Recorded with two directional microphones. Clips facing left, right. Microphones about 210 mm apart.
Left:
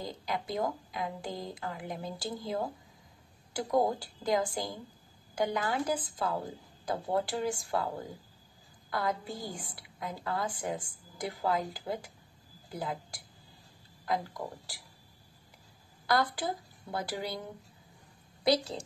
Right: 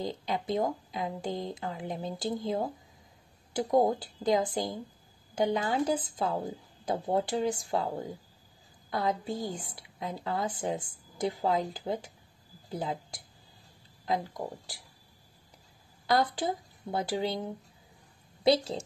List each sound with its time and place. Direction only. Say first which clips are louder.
0.0 s a woman's voice: right 4 dB; 25° right (ahead or behind)
8.9 s a woman's voice: right 3 dB; 25° right (ahead or behind)
16.1 s a woman's voice: right 2 dB; 20° right (ahead or behind)